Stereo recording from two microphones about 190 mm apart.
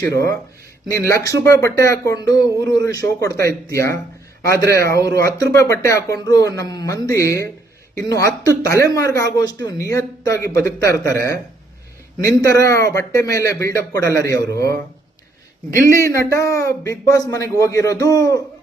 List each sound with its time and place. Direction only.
0.0 s speech: 15° left (ahead or behind)
15.9 s speech: 15° left (ahead or behind)